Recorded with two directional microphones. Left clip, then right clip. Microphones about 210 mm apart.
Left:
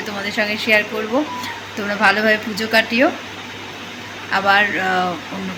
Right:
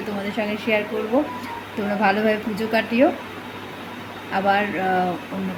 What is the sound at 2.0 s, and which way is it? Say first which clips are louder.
A woman's voice: left 5 dB; 10° right (ahead or behind).